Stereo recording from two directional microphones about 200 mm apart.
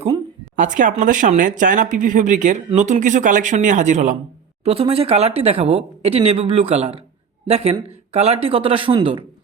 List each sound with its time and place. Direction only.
0.5 s speech: 40° right (ahead or behind)